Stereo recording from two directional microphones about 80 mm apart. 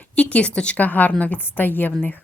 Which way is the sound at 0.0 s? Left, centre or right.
Centre.